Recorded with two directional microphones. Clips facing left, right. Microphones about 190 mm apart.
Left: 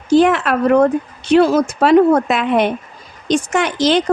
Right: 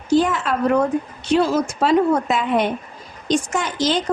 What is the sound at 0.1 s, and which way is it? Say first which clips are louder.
A woman's voice: left 5 dB; 70° left (ahead or behind).